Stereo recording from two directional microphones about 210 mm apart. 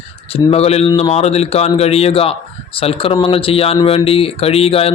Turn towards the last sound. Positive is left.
turn(degrees=30)  # may be behind; listen again after turning